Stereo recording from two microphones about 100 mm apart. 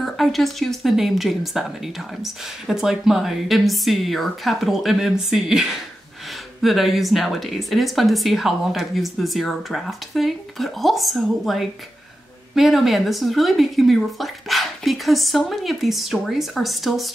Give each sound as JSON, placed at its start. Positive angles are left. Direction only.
{"t": 0.0, "sound": "speech", "side_deg": 0}